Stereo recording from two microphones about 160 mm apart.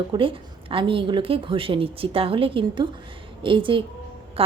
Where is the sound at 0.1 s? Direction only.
35° right (ahead or behind).